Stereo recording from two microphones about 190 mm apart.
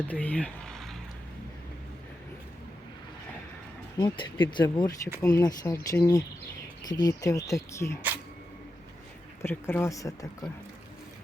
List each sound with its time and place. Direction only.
0.1 s speech: 10° left (ahead or behind)
3.9 s speech: 25° left (ahead or behind)
9.4 s speech: 10° left (ahead or behind)